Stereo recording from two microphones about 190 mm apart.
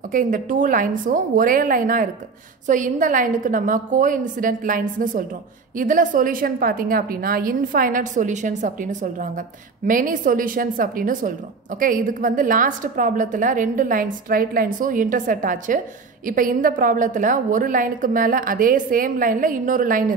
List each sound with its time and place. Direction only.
0.1 s a woman's voice: 45° right (ahead or behind)